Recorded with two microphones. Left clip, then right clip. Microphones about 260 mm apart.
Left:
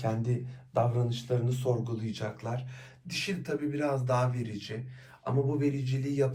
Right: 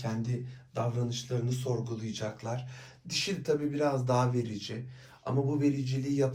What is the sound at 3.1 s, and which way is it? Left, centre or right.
A man's voice, centre.